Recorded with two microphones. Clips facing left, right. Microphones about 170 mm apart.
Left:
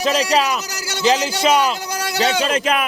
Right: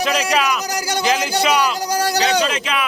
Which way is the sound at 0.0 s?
35° left (ahead or behind).